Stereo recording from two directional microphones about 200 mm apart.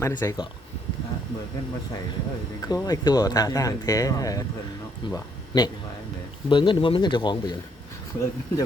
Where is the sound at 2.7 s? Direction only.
20° left (ahead or behind).